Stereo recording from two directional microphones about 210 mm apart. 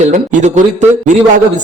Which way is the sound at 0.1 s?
35° right (ahead or behind).